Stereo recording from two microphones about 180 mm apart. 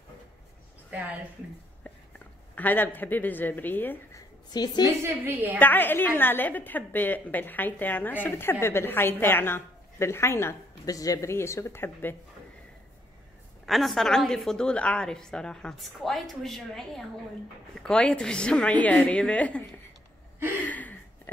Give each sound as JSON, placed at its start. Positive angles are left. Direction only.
{"t": 0.8, "sound": "a woman's voice", "side_deg": -10}
{"t": 2.1, "sound": "speech", "side_deg": 10}
{"t": 4.5, "sound": "a woman's voice", "side_deg": 20}
{"t": 4.8, "sound": "a woman's voice", "side_deg": -15}
{"t": 5.6, "sound": "a woman's voice", "side_deg": 10}
{"t": 13.7, "sound": "a woman's voice", "side_deg": 0}
{"t": 20.5, "sound": "a sound", "side_deg": 10}